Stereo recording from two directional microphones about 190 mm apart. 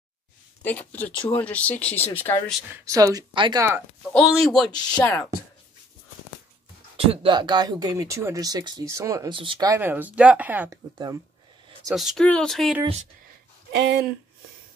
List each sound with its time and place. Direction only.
0.6 s speech: 10° left (ahead or behind)
2.7 s speech: 15° right (ahead or behind)
4.1 s speech: centre (ahead or behind)
7.0 s speech: 25° right (ahead or behind); by 10.8 s 10° right (ahead or behind)
11.9 s speech: centre (ahead or behind)
13.7 s speech: 65° right (ahead or behind)